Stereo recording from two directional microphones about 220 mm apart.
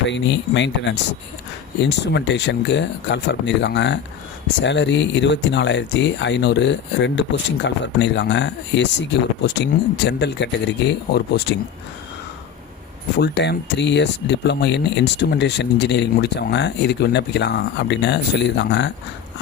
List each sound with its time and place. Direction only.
0.1 s speech: 55° left (ahead or behind)
13.1 s speech: 50° left (ahead or behind)